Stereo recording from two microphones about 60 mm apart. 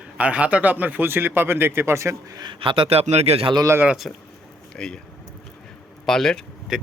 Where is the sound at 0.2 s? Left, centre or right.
Right.